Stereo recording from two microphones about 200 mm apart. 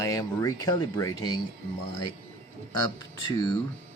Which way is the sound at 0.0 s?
15° left (ahead or behind).